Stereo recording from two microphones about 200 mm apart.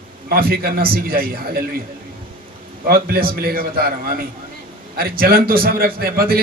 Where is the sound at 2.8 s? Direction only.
45° right (ahead or behind).